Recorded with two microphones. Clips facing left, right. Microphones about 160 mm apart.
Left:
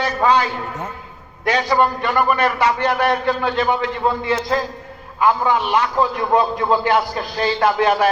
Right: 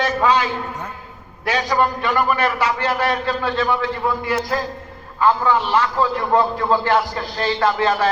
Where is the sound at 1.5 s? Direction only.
20° left (ahead or behind).